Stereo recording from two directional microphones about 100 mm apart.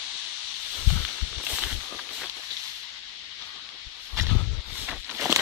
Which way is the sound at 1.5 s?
5° right (ahead or behind).